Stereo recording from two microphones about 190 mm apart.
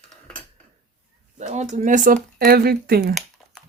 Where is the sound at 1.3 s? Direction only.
40° right (ahead or behind).